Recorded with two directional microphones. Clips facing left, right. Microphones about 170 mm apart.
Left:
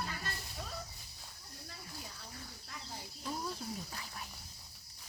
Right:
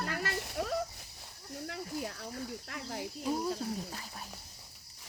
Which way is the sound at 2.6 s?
70° right (ahead or behind).